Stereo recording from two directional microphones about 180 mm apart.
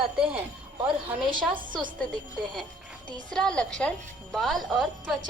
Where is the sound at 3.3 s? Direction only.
5° left (ahead or behind).